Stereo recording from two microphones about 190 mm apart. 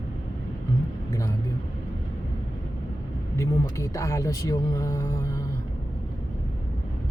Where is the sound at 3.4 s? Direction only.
15° left (ahead or behind).